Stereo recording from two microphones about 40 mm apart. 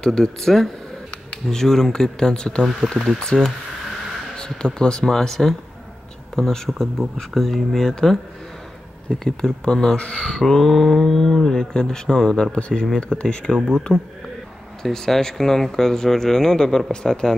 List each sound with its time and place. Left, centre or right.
0.0 s speech: centre
3.3 s a sound: centre
4.4 s speech: left
7.3 s speech: centre
9.1 s speech: left
10.4 s a sound: centre
11.1 s speech: centre
11.7 s speech: centre
12.5 s speech: left
12.8 s speech: centre